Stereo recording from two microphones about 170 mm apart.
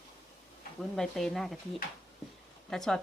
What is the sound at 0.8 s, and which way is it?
Speech, centre (ahead or behind).